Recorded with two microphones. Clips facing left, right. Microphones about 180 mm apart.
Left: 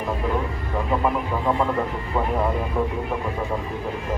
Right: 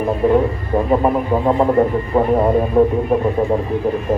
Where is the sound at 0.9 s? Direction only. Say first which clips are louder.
Right 7 dB; 40° right (ahead or behind).